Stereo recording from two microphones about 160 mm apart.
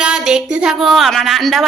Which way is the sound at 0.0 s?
5° right (ahead or behind).